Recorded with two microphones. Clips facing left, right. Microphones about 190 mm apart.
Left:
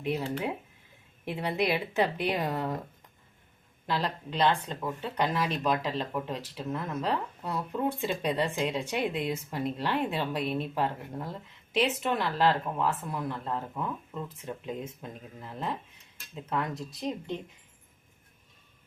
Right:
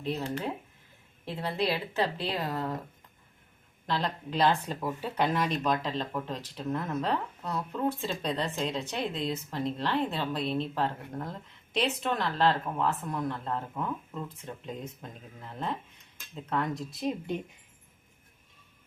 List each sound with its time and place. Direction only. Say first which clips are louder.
0.2 s speech: left 1 dB; 5° left (ahead or behind)
3.8 s speech: even; 5° left (ahead or behind)